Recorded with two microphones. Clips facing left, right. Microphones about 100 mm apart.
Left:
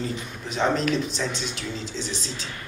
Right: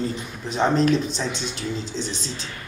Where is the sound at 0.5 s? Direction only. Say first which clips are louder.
Right 4 dB; 35° right (ahead or behind).